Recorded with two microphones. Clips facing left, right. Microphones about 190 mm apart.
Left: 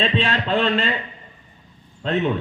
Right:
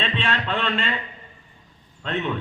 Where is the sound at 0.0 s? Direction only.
35° left (ahead or behind).